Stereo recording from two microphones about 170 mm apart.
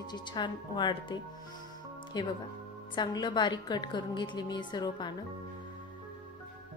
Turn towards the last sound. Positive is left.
turn(degrees=25)  # may be behind; listen again after turning